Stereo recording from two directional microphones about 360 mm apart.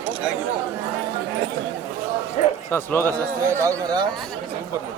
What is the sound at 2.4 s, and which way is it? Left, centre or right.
Speech, centre.